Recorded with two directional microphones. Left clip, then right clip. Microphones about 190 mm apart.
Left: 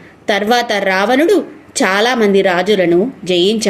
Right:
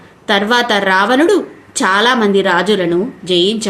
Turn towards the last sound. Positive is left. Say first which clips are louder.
# left 2 dB
turn(degrees=20)  # may be behind; listen again after turning